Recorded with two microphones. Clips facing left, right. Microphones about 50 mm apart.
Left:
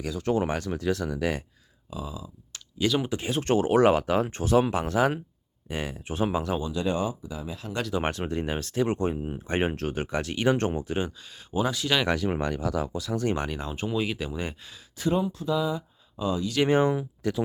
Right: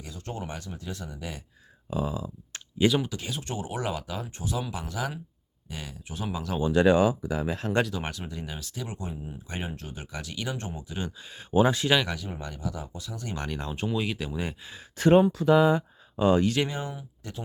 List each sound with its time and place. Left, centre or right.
0.0 s speech: left
1.9 s speech: right
3.1 s speech: left
3.4 s speech: left
6.7 s speech: right
8.1 s speech: left
11.2 s speech: right
12.1 s speech: left
13.5 s speech: centre
14.9 s speech: right
16.6 s speech: left